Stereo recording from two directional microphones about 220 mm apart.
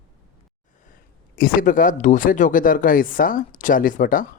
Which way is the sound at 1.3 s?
40° left (ahead or behind).